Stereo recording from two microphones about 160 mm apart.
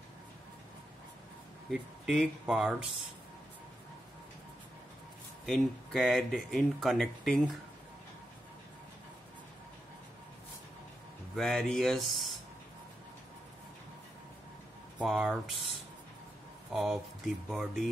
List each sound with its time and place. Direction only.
1.7 s speech: centre (ahead or behind)
5.4 s speech: centre (ahead or behind)
11.3 s speech: centre (ahead or behind)
15.0 s speech: centre (ahead or behind)
16.7 s speech: centre (ahead or behind)